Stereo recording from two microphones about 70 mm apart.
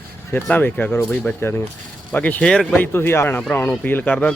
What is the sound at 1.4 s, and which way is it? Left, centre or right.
Speech, left.